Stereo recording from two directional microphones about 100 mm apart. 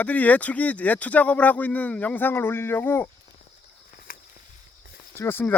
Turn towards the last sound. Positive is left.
turn(degrees=20)  # may be behind; listen again after turning